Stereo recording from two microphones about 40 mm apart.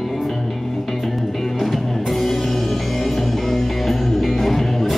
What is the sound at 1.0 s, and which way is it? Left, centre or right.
Music, centre.